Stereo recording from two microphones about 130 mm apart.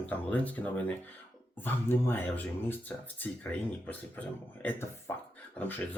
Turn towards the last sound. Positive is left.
turn(degrees=15)  # may be behind; listen again after turning